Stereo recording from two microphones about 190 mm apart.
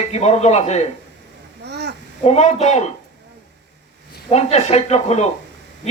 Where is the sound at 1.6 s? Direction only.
60° right (ahead or behind).